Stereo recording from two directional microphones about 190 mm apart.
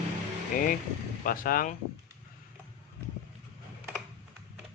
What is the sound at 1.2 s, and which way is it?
Speech, 45° left (ahead or behind).